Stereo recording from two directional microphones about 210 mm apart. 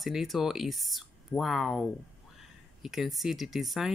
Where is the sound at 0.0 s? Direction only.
Centre (ahead or behind).